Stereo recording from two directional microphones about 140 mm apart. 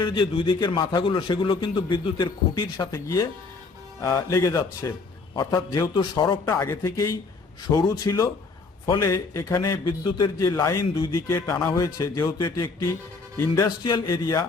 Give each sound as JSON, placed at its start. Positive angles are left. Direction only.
{"t": 0.0, "sound": "a man's voice", "side_deg": 35}
{"t": 6.4, "sound": "a man's voice", "side_deg": 20}
{"t": 13.7, "sound": "a man's voice", "side_deg": 30}